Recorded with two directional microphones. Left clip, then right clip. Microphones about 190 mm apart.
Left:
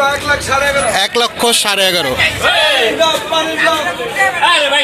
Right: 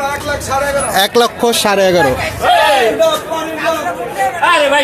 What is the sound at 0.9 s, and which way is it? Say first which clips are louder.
Speech: right 2 dB; 20° right (ahead or behind).